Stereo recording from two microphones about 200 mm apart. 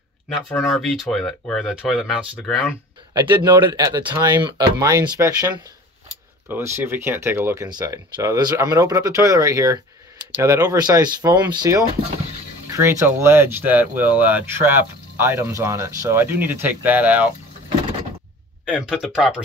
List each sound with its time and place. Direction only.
0.5 s speech: centre (ahead or behind)
3.1 s speech: 20° right (ahead or behind)
6.5 s speech: 10° right (ahead or behind)
18.7 s speech: 5° right (ahead or behind)